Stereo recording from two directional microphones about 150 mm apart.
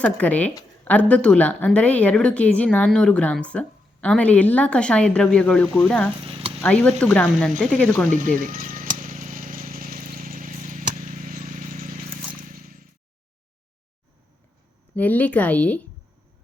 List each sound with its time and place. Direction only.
0.0 s a woman's voice: 10° left (ahead or behind)
6.2 s sizzle: 40° right (ahead or behind)
6.6 s a woman's voice: 10° left (ahead or behind)
8.0 s speech: 60° right (ahead or behind)
9.0 s a sound: 60° right (ahead or behind)
14.9 s a woman's voice: 10° left (ahead or behind)